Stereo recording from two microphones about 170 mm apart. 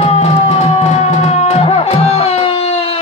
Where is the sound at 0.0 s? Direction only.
40° left (ahead or behind).